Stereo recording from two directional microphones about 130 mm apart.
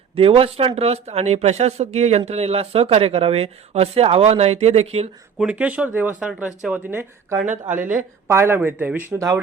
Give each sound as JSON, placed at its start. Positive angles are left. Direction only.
{"t": 0.2, "sound": "speech", "side_deg": -45}
{"t": 5.4, "sound": "speech", "side_deg": -10}
{"t": 9.1, "sound": "speech", "side_deg": -25}